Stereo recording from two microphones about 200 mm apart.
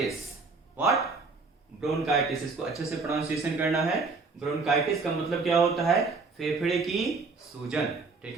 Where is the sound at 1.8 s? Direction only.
Centre (ahead or behind).